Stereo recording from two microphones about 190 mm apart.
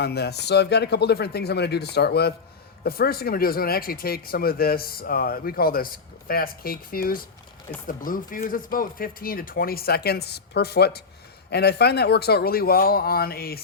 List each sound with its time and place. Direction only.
0.0 s speech: 60° left (ahead or behind)